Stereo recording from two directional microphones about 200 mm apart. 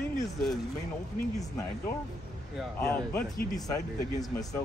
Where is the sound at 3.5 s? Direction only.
20° left (ahead or behind).